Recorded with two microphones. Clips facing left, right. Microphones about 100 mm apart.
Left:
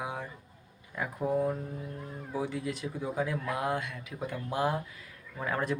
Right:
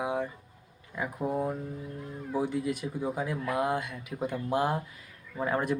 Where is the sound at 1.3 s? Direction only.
25° right (ahead or behind).